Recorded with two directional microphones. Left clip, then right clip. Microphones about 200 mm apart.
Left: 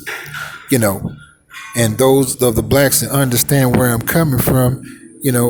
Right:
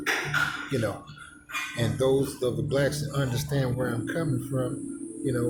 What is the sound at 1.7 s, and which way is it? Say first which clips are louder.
Speech: left 13 dB; 45° left (ahead or behind).